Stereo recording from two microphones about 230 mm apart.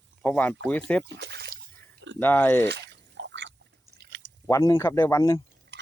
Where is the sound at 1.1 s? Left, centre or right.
Right.